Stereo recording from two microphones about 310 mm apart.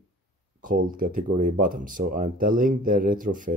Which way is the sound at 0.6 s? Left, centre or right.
Right.